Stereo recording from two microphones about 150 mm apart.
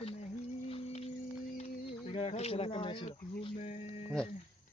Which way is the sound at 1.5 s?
45° left (ahead or behind).